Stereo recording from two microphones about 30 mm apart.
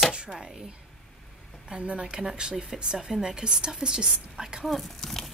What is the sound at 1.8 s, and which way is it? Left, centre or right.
A woman's voice, right.